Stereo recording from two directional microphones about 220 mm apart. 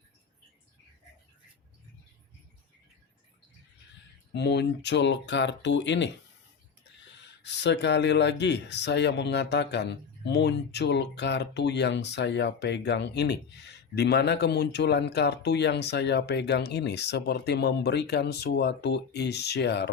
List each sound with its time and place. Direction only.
4.4 s speech: 50° left (ahead or behind)
7.4 s speech: 50° left (ahead or behind)